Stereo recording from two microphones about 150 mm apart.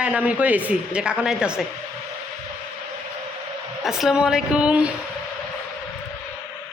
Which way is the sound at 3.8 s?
5° right (ahead or behind).